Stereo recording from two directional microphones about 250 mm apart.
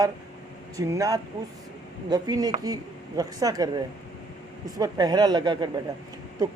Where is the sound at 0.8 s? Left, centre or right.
Centre.